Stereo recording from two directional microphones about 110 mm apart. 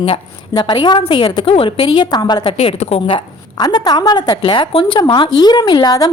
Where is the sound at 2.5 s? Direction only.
70° left (ahead or behind).